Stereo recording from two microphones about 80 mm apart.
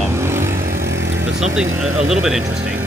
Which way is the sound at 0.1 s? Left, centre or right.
Right.